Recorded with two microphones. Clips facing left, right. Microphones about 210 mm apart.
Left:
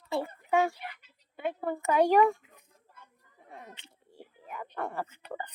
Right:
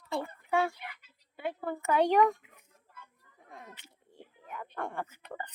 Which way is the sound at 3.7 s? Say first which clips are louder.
Left 2 dB; 30° left (ahead or behind).